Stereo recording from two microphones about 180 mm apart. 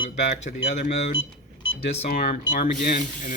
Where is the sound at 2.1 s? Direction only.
60° left (ahead or behind); by 3.3 s 45° left (ahead or behind).